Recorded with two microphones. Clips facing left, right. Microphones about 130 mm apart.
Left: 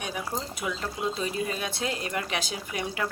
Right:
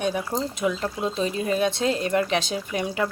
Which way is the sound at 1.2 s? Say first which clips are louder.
Right 7 dB; 25° right (ahead or behind).